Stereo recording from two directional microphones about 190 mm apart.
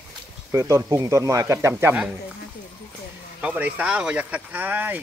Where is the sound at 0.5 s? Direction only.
15° right (ahead or behind).